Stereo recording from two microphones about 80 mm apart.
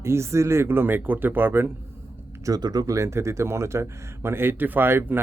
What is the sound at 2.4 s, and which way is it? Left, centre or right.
Speech, right.